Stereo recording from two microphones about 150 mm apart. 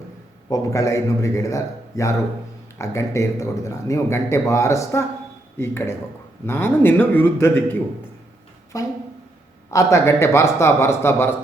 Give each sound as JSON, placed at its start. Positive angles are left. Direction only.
{"t": 0.5, "sound": "a man's voice", "side_deg": 20}